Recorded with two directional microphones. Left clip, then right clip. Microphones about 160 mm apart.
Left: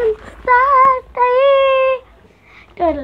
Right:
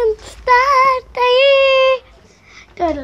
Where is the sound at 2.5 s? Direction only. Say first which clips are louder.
Left 2 dB; 5° left (ahead or behind).